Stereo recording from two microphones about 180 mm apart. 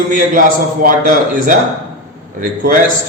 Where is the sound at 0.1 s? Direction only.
50° right (ahead or behind).